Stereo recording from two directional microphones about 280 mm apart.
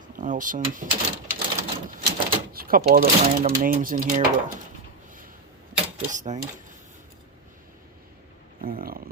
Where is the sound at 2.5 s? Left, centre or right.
Right.